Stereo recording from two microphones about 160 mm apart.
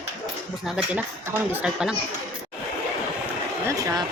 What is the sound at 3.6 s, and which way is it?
Speech, 20° right (ahead or behind).